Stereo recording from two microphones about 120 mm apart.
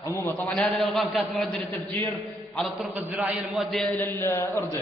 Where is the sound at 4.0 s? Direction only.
20° left (ahead or behind).